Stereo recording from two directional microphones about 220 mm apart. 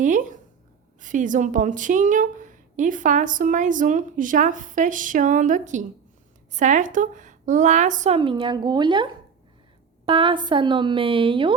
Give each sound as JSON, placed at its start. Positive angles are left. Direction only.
{"t": 0.0, "sound": "a woman's voice", "side_deg": -35}
{"t": 10.1, "sound": "a woman's voice", "side_deg": -25}